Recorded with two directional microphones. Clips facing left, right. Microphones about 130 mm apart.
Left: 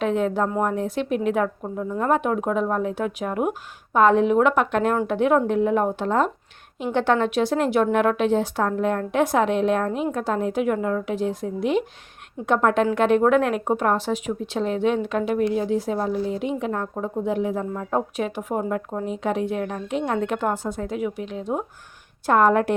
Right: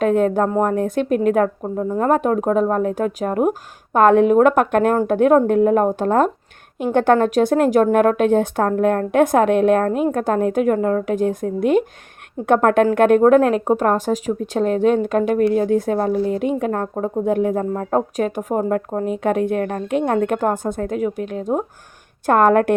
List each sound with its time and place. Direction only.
0.0 s speech: 50° right (ahead or behind)
1.6 s speech: 30° right (ahead or behind)
3.9 s speech: 55° right (ahead or behind)